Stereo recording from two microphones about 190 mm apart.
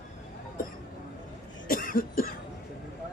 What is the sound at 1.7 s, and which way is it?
Cough, 50° left (ahead or behind).